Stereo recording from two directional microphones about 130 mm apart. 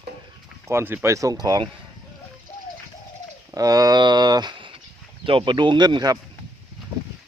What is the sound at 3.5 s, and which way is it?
Speech, 25° right (ahead or behind).